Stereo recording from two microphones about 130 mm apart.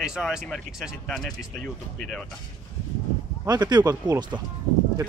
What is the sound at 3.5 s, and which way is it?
Speech, 35° right (ahead or behind).